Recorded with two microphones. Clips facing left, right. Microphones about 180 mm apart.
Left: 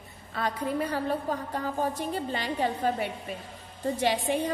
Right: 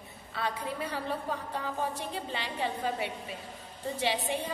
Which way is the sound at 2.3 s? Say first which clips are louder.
Left 3 dB; 45° left (ahead or behind).